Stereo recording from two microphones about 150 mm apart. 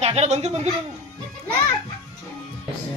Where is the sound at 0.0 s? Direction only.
45° right (ahead or behind).